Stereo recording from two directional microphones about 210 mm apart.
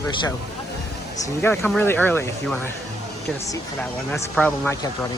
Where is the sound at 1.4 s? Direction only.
10° left (ahead or behind).